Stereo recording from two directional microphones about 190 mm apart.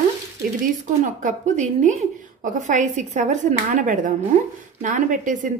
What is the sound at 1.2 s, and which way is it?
Speech, 40° right (ahead or behind).